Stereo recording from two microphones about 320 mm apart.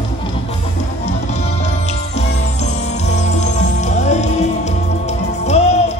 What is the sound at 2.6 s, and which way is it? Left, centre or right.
Music, left.